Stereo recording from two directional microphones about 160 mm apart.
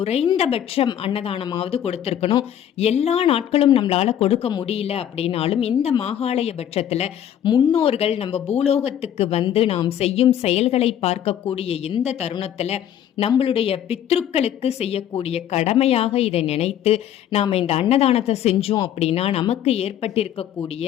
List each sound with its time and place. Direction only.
0.0 s a woman's voice: 40° left (ahead or behind)
7.4 s a woman's voice: 30° left (ahead or behind)